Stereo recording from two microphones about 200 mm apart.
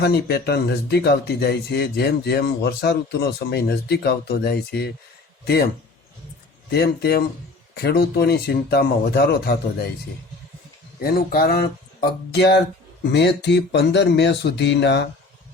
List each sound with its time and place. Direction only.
0.0 s speech: 55° left (ahead or behind)
6.7 s speech: 50° left (ahead or behind)
11.0 s speech: 50° left (ahead or behind)